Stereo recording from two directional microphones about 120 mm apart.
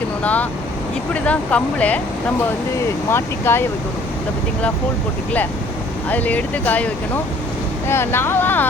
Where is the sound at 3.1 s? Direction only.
20° left (ahead or behind).